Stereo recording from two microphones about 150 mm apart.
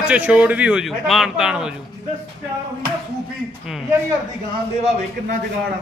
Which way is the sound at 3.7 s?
Centre (ahead or behind).